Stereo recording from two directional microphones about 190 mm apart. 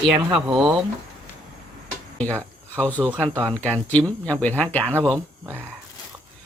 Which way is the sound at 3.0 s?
10° right (ahead or behind).